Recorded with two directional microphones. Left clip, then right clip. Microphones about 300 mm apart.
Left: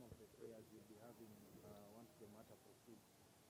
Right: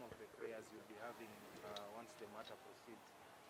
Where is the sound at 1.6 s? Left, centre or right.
Centre.